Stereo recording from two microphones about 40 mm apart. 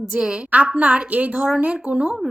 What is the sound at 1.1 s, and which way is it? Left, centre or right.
Speech, right.